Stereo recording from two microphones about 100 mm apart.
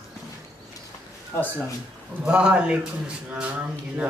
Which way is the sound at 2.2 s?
10° right (ahead or behind).